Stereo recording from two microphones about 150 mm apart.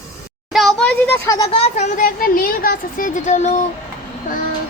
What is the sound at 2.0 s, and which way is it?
Speech, 70° left (ahead or behind).